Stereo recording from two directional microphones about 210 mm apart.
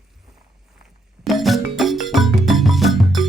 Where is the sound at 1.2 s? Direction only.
Centre (ahead or behind).